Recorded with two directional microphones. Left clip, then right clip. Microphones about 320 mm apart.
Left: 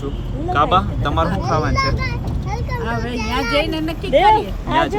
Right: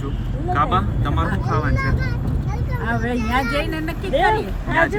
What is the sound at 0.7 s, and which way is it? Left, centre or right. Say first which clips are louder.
Speech: left 5 dB; centre.